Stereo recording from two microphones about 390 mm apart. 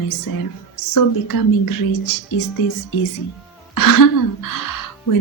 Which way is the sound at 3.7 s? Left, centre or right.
Left.